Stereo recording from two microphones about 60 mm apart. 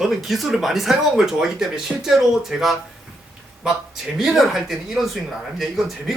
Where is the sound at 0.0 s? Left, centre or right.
Centre.